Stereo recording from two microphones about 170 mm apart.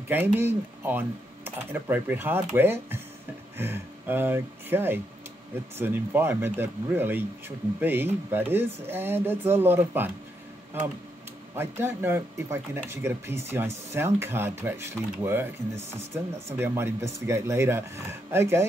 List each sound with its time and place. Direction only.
0.1 s speech: 10° right (ahead or behind)
11.5 s speech: 15° right (ahead or behind)